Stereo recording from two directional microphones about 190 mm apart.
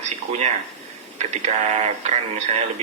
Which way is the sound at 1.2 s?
35° right (ahead or behind).